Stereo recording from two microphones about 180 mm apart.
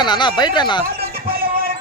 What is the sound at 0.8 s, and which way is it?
Music, 60° right (ahead or behind).